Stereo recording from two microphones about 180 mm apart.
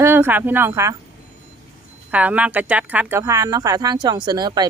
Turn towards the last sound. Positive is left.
turn(degrees=-25)  # may be behind; listen again after turning